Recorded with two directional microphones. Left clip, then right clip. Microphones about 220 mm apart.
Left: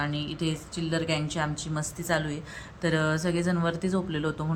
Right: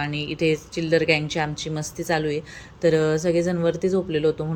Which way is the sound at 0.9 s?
40° left (ahead or behind).